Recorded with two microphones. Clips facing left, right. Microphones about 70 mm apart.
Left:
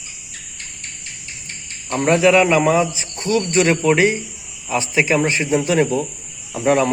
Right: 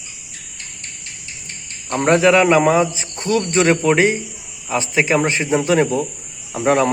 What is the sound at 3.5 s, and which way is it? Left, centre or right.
Speech, right.